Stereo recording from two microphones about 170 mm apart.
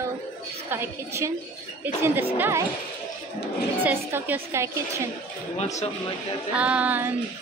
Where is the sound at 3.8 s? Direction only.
10° right (ahead or behind).